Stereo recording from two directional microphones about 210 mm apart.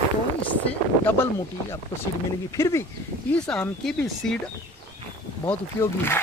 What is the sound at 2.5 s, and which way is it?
Speech, 15° left (ahead or behind).